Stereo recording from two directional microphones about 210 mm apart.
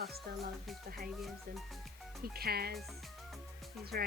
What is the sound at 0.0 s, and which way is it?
A woman's voice, 50° right (ahead or behind).